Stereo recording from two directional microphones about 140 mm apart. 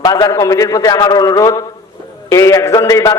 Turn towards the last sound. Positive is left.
turn(degrees=25)  # may be behind; listen again after turning